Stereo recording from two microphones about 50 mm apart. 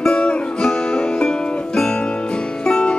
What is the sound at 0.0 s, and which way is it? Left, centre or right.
Music, left.